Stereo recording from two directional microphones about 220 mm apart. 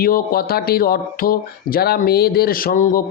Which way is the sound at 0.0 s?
45° left (ahead or behind).